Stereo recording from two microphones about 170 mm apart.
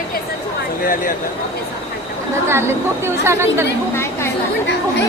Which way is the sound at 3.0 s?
15° right (ahead or behind).